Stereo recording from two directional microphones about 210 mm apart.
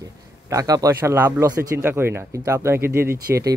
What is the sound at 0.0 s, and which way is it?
A man's voice, 15° right (ahead or behind).